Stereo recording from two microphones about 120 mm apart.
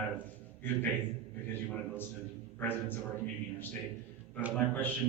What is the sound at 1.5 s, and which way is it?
A man's voice, 15° left (ahead or behind).